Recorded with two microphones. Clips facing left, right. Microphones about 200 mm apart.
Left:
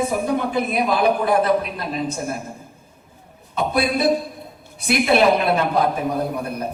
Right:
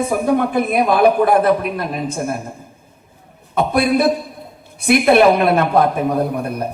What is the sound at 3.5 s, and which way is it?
A man's voice, 55° right (ahead or behind).